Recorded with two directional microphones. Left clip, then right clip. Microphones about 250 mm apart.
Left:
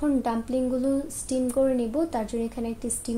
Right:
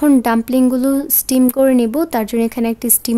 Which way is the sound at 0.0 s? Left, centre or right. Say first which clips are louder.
Right 12 dB; right.